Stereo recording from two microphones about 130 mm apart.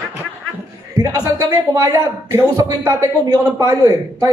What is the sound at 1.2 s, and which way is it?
A man's voice, 25° right (ahead or behind).